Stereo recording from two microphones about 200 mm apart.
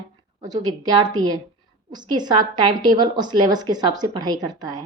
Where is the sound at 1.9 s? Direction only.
20° right (ahead or behind).